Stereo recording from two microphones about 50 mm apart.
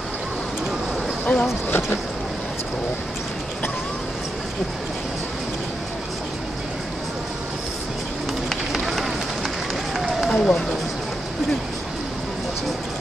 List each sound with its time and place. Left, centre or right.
1.2 s speech: left
8.5 s run: centre